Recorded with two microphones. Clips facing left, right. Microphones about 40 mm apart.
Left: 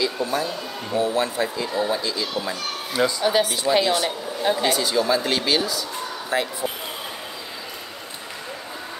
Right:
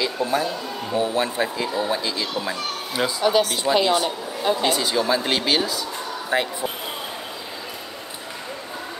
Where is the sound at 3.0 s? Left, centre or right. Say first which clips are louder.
Left 3 dB; centre.